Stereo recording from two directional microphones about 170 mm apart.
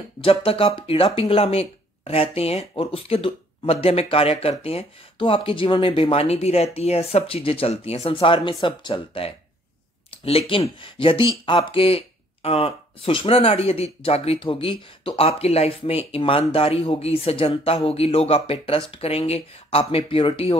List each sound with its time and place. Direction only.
0.2 s speech: 35° left (ahead or behind)